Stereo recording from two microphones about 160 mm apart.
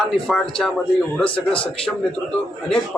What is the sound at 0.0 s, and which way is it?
Speech, 5° left (ahead or behind).